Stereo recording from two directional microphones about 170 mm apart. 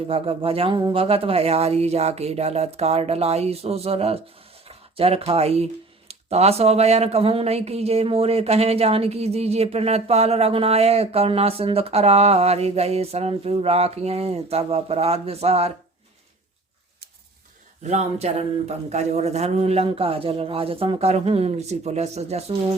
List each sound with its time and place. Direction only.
0.1 s speech: 35° right (ahead or behind)
17.8 s speech: 40° right (ahead or behind)